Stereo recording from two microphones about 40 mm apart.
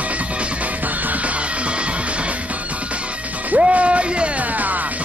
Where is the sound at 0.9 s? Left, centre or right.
Right.